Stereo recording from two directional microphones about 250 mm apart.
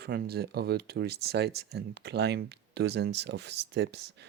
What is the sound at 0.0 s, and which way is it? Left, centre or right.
Speech, right.